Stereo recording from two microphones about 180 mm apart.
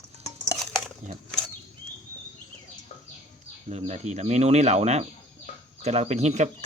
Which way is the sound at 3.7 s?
35° right (ahead or behind).